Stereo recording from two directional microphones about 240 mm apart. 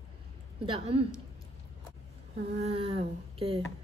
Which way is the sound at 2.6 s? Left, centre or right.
Right.